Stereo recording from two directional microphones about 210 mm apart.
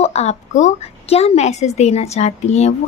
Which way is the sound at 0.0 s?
30° left (ahead or behind).